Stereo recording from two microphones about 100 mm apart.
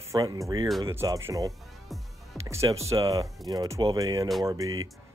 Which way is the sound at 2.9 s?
40° right (ahead or behind).